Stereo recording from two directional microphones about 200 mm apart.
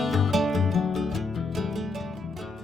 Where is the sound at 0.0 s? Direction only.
Centre (ahead or behind).